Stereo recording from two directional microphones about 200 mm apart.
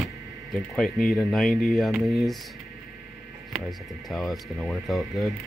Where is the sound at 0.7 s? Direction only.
Centre (ahead or behind).